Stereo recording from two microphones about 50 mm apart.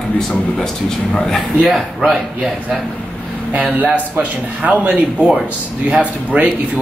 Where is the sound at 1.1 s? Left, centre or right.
Centre.